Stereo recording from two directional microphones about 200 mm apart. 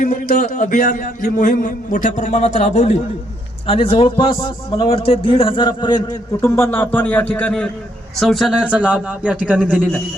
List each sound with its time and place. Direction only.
0.0 s a man's voice: 40° left (ahead or behind); by 10.0 s 5° left (ahead or behind)